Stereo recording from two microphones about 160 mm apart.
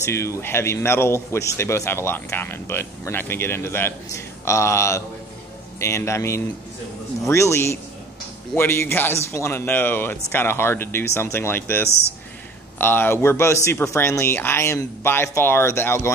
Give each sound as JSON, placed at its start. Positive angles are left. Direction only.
{"t": 0.0, "sound": "speech", "side_deg": 15}